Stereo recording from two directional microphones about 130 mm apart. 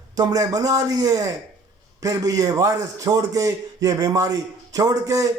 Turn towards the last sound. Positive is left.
turn(degrees=-25)  # may be behind; listen again after turning